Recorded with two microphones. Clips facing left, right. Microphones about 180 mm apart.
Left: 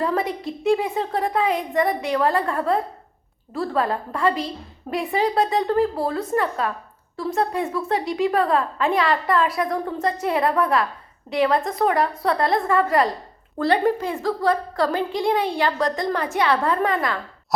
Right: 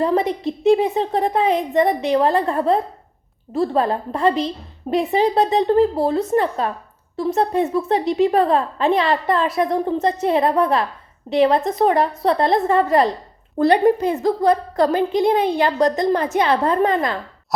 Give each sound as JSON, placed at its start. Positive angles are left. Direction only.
{"t": 0.0, "sound": "a woman's voice", "side_deg": -20}